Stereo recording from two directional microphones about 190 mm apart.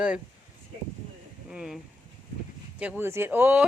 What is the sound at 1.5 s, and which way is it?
Speech, 5° right (ahead or behind).